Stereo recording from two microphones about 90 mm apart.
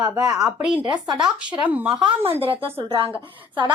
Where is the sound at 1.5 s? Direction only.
15° right (ahead or behind).